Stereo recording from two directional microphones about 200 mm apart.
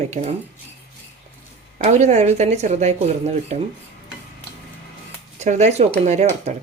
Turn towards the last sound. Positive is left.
turn(degrees=-35)  # may be behind; listen again after turning